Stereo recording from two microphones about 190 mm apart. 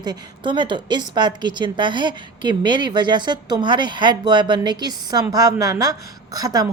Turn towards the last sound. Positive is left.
turn(degrees=-20)  # may be behind; listen again after turning